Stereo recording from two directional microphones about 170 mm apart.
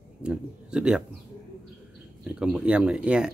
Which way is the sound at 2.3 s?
5° right (ahead or behind).